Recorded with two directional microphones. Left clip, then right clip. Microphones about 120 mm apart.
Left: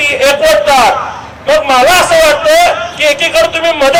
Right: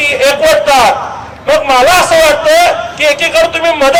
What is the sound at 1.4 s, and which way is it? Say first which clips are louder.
A man's voice: even; 35° right (ahead or behind).